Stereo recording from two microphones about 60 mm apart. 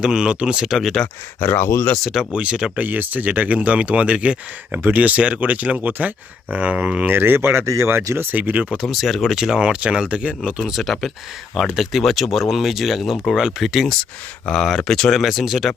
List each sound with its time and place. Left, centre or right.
0.0 s speech: centre
0.7 s speech: centre
1.4 s speech: left
2.3 s speech: centre
2.7 s speech: right
7.1 s speech: right
7.6 s speech: right
8.1 s speech: right
8.8 s speech: centre
10.7 s speech: centre